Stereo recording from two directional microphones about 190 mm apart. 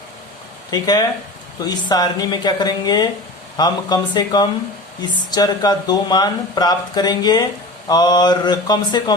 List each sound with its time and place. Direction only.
0.7 s speech: 20° left (ahead or behind)